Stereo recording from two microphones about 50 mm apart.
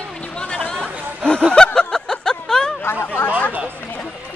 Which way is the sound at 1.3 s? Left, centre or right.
Left.